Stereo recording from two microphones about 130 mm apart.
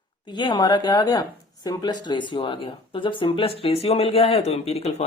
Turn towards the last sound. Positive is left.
turn(degrees=55)  # may be behind; listen again after turning